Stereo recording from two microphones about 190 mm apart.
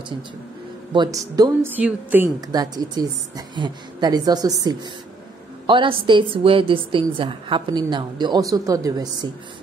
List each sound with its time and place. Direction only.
0.9 s a woman's voice: 20° right (ahead or behind)
1.8 s a woman's voice: 10° right (ahead or behind)